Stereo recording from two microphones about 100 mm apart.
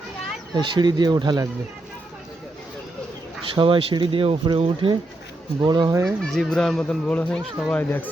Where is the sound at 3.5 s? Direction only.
60° right (ahead or behind).